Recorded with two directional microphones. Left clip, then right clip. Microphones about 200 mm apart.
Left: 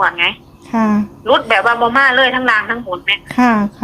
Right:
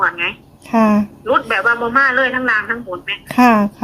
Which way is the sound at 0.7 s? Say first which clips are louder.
Right 2 dB; 20° right (ahead or behind).